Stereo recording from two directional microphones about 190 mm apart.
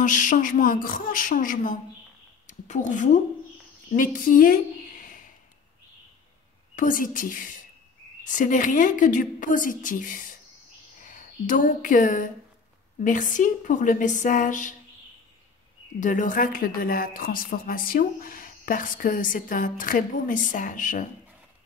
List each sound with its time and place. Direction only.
0.0 s a woman's voice: 40° left (ahead or behind)
6.7 s a woman's voice: 45° left (ahead or behind)
16.0 s a woman's voice: 40° left (ahead or behind)